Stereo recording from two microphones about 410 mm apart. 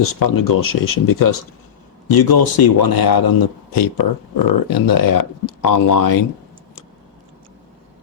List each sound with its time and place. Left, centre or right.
0.0 s a man's voice: left